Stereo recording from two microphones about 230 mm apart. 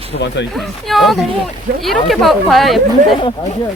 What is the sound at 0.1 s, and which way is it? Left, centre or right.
Speech, left.